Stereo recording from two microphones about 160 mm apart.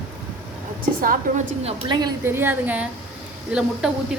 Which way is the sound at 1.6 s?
25° right (ahead or behind).